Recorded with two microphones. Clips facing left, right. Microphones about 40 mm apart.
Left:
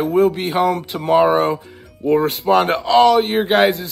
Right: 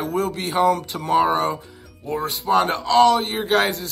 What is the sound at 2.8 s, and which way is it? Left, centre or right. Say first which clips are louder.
Speech: left 3 dB; left.